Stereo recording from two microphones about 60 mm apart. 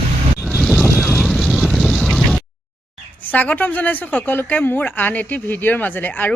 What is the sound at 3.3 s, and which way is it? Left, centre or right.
Speech, left.